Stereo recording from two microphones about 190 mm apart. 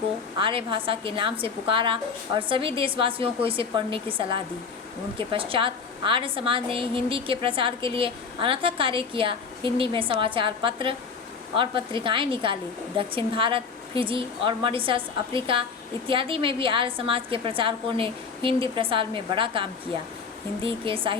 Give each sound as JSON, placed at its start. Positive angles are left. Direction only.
{"t": 0.3, "sound": "a woman's voice", "side_deg": -25}
{"t": 5.1, "sound": "a woman's voice", "side_deg": -30}